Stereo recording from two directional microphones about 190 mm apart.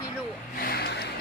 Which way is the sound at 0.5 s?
55° left (ahead or behind).